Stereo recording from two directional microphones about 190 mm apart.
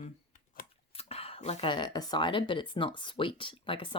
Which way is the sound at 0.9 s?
30° left (ahead or behind).